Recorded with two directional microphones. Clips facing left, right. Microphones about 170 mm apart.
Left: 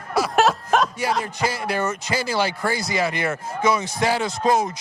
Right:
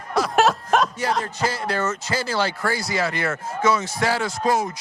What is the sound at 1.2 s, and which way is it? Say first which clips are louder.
Speech: even; 10° left (ahead or behind).